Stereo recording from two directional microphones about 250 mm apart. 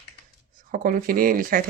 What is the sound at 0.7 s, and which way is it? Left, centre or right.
Speech, right.